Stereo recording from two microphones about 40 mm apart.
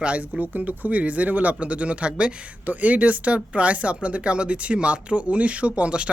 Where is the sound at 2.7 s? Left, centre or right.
Right.